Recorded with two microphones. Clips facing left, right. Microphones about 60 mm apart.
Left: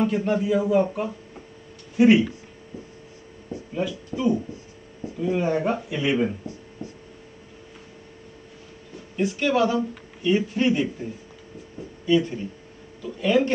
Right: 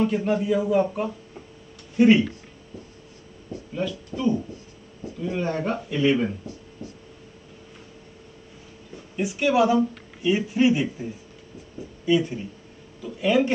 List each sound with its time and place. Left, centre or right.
0.0 s speech: centre
3.7 s speech: centre
6.8 s writing: left
9.1 s speech: centre
12.1 s speech: centre